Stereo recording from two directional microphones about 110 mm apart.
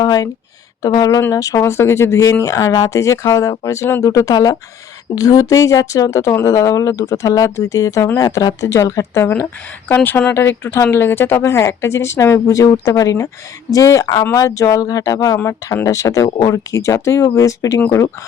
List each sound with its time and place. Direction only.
0.0 s speech: 35° left (ahead or behind)